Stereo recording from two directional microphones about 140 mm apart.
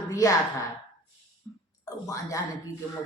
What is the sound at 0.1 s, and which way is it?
Speech, 25° left (ahead or behind).